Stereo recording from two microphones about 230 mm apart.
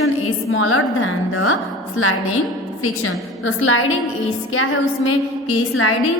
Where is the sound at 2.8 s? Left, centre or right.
Left.